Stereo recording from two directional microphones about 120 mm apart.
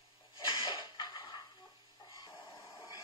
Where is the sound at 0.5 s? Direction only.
40° left (ahead or behind).